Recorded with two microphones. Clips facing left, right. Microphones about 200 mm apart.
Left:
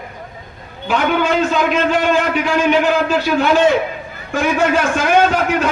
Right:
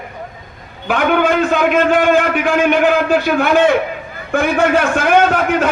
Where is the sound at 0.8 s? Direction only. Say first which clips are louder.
Right 2 dB; 55° right (ahead or behind).